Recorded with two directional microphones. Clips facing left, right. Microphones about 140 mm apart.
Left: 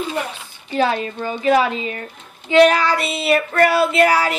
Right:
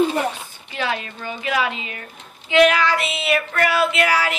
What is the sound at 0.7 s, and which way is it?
Child singing, 35° left (ahead or behind).